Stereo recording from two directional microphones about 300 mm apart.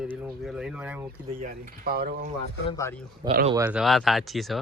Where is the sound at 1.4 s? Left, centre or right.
Right.